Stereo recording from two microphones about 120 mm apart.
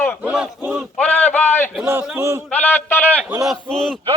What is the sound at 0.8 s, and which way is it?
Speech, 10° left (ahead or behind).